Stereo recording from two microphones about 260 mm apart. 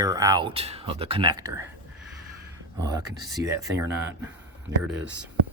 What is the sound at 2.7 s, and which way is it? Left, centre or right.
Speech, centre.